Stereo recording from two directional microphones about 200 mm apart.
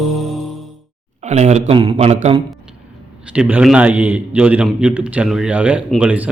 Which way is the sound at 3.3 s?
5° right (ahead or behind).